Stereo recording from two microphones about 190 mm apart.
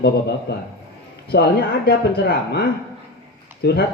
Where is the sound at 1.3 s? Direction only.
60° left (ahead or behind).